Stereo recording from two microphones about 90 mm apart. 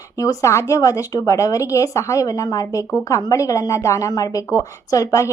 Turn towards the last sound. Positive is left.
turn(degrees=35)  # may be behind; listen again after turning